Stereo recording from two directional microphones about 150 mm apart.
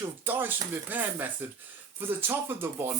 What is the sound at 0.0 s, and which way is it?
A man's voice, 15° right (ahead or behind).